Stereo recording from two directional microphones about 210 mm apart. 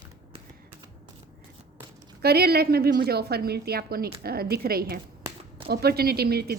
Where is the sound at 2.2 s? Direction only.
50° right (ahead or behind).